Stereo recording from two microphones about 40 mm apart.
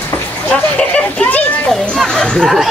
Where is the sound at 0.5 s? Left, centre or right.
Left.